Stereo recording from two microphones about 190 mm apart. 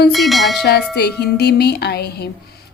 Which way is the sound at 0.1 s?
Centre (ahead or behind).